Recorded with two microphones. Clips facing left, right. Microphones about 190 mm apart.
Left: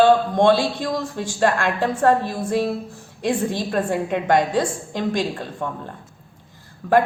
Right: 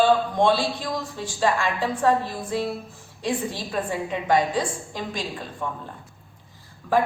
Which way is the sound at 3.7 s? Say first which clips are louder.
Left 5 dB; 60° left (ahead or behind).